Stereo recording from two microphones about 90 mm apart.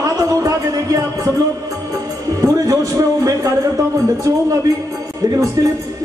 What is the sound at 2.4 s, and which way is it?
Music, 40° right (ahead or behind).